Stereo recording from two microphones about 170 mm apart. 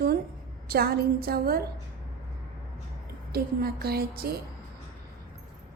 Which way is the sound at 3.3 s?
65° right (ahead or behind).